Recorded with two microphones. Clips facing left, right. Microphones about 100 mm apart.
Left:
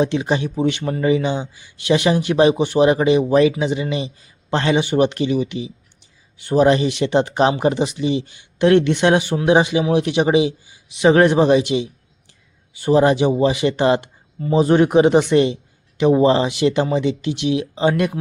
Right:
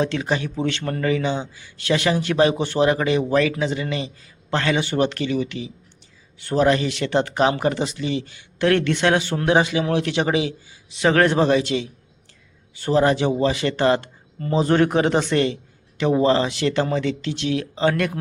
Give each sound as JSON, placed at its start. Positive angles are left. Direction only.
{"t": 0.0, "sound": "a man's voice", "side_deg": 20}